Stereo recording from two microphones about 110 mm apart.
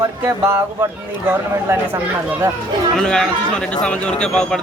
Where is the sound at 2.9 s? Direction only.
5° left (ahead or behind).